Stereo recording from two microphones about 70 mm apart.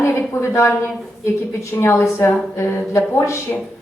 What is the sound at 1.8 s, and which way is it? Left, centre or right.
A woman's voice, left.